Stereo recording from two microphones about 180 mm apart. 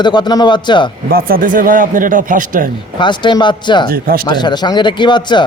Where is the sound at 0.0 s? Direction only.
25° left (ahead or behind).